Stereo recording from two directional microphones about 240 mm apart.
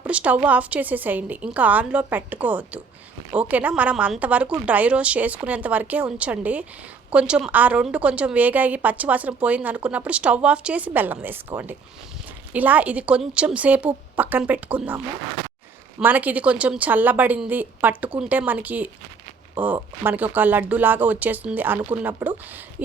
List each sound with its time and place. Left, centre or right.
0.0 s a woman's voice: centre